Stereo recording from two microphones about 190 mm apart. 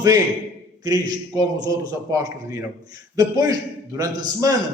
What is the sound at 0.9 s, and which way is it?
A man's voice, 20° right (ahead or behind).